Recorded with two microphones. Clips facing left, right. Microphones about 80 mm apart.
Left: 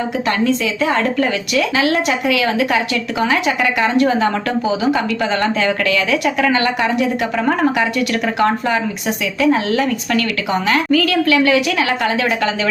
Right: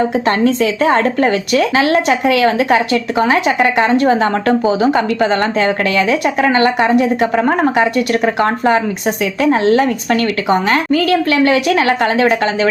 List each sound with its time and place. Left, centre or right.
0.3 s speech: right